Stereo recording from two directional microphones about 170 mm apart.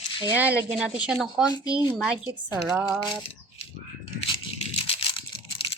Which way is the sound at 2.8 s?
10° right (ahead or behind).